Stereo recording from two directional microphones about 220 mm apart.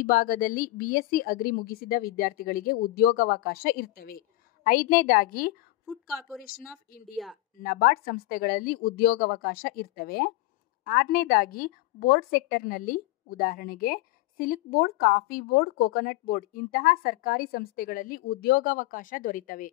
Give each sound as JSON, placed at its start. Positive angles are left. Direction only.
{"t": 0.0, "sound": "a woman's voice", "side_deg": 40}
{"t": 7.5, "sound": "a woman's voice", "side_deg": 40}